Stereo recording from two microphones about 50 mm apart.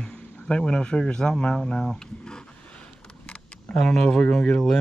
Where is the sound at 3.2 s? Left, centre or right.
Centre.